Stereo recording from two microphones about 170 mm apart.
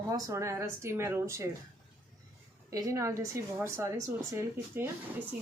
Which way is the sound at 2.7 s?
20° right (ahead or behind).